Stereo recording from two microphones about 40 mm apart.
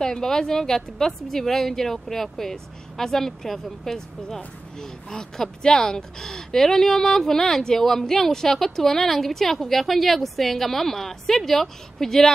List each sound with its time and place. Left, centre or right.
0.0 s speech: centre